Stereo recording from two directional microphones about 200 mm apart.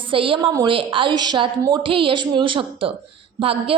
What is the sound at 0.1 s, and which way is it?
A woman's voice, 25° right (ahead or behind).